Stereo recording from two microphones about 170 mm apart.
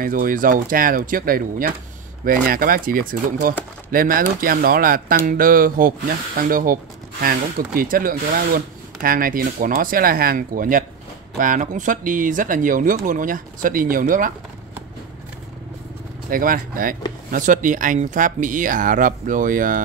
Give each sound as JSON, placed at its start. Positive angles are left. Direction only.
{"t": 0.0, "sound": "speech", "side_deg": -55}
{"t": 16.3, "sound": "speech", "side_deg": -55}